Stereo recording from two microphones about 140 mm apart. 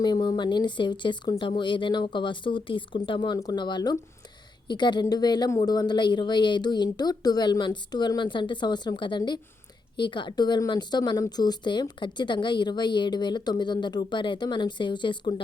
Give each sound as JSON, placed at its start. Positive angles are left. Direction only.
{"t": 0.0, "sound": "speech", "side_deg": 30}